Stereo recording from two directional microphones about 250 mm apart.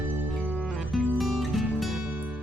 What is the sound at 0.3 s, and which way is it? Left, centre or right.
Music, centre.